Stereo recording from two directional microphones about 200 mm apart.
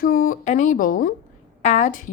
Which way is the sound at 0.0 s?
45° left (ahead or behind).